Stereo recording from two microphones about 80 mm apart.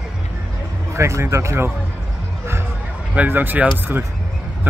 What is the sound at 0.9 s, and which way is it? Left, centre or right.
Speech, right.